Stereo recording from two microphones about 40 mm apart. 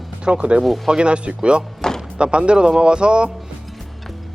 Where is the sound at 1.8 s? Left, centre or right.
Centre.